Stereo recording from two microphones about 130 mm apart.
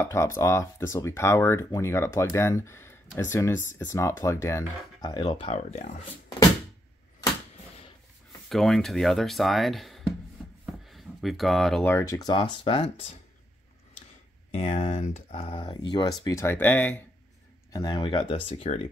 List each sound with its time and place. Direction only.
0.0 s speech: 20° left (ahead or behind)
5.1 s speech: 40° left (ahead or behind)
5.5 s speech: 75° left (ahead or behind)
8.5 s speech: centre (ahead or behind)
10.9 s a sound: centre (ahead or behind)
11.8 s speech: 20° left (ahead or behind)
12.6 s speech: 45° left (ahead or behind)
14.5 s speech: 55° left (ahead or behind); by 16.9 s 15° left (ahead or behind)
17.7 s speech: 30° left (ahead or behind); by 18.8 s 50° left (ahead or behind)